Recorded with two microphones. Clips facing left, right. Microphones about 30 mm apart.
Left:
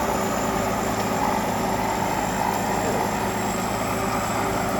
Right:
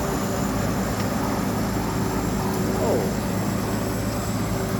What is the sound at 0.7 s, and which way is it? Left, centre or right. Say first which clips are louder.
Vehicle: left 2 dB; left.